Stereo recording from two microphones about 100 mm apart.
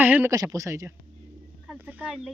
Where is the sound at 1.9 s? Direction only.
15° right (ahead or behind).